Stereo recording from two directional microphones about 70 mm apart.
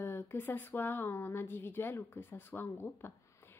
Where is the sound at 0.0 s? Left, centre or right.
Left.